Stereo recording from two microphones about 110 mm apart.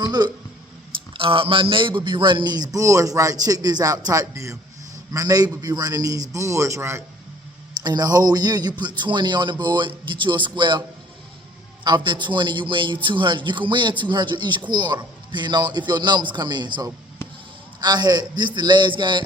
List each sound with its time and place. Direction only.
0.0 s speech: 40° right (ahead or behind)
1.1 s speech: 55° right (ahead or behind); by 7.0 s 25° right (ahead or behind)
7.8 s a man's voice: 35° right (ahead or behind)
17.2 s honk: 25° left (ahead or behind)
17.7 s speech: 40° right (ahead or behind)